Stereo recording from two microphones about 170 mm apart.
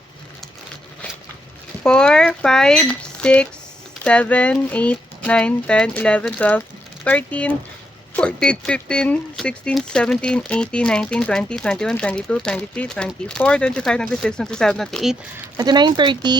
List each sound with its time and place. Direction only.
1.8 s speech: 5° left (ahead or behind)
15.5 s speech: 25° right (ahead or behind)